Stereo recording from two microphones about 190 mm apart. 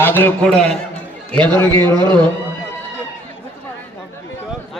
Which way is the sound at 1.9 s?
25° right (ahead or behind).